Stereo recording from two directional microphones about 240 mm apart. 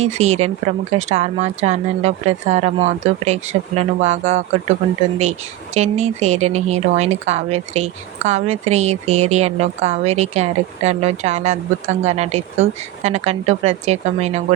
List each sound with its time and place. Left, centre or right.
0.0 s speech: right
5.7 s speech: right